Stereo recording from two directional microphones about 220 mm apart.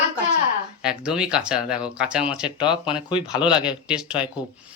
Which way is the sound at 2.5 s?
20° left (ahead or behind).